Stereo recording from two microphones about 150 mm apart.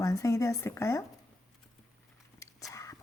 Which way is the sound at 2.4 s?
20° left (ahead or behind).